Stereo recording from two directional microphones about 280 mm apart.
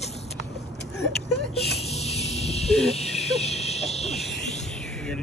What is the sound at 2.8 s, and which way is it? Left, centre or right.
Speech, left.